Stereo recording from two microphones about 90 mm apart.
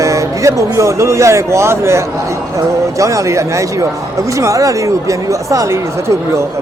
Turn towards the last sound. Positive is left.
turn(degrees=-40)  # may be behind; listen again after turning